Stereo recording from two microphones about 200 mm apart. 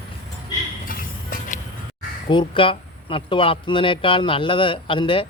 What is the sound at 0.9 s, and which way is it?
Music, 45° left (ahead or behind).